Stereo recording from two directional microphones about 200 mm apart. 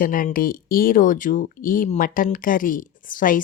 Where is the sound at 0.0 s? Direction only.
45° left (ahead or behind).